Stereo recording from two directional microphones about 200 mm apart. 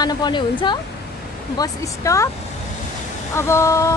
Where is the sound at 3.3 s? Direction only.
15° left (ahead or behind).